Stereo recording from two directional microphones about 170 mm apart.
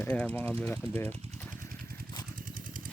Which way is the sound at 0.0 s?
10° left (ahead or behind).